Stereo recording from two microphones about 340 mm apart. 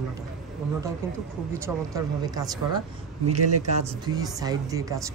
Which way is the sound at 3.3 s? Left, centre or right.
Right.